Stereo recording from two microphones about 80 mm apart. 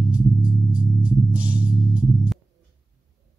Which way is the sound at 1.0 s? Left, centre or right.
Centre.